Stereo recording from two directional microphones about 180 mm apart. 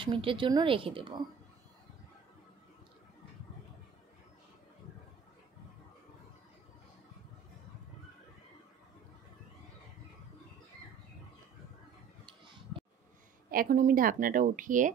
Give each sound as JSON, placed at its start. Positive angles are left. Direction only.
{"t": 0.0, "sound": "speech", "side_deg": -30}
{"t": 13.5, "sound": "a woman's voice", "side_deg": -50}